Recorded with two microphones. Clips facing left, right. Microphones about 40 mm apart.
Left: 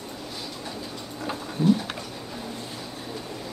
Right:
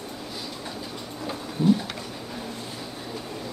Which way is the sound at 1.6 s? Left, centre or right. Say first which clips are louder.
Even; centre.